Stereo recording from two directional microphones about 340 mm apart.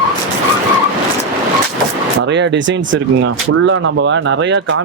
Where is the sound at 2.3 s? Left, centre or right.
Right.